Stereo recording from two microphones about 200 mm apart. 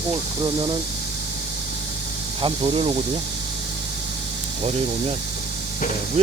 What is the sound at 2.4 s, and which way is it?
Speech, 30° right (ahead or behind).